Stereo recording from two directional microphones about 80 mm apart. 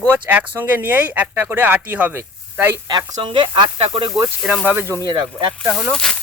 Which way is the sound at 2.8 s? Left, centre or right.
Right.